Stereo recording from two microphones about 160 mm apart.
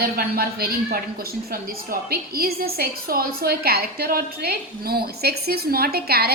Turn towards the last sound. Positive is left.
turn(degrees=-75)  # may be behind; listen again after turning